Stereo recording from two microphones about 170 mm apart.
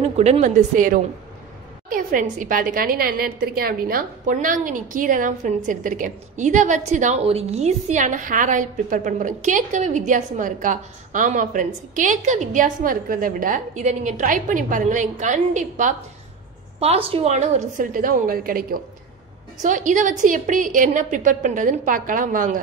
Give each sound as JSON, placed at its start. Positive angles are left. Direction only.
{"t": 0.2, "sound": "a woman's voice", "side_deg": -45}